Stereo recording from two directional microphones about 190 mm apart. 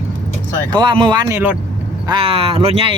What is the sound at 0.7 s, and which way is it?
Speech, 25° right (ahead or behind).